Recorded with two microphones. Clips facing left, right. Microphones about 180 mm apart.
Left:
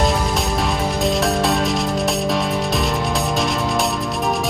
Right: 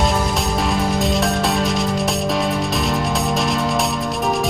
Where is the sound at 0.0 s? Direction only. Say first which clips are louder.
Even; centre (ahead or behind).